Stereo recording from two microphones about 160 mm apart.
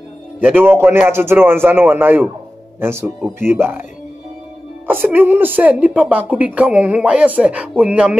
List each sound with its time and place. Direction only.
0.4 s speech: 10° right (ahead or behind)
4.8 s speech: 10° right (ahead or behind)